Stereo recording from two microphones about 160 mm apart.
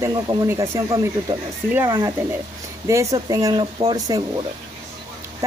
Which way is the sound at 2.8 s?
20° right (ahead or behind).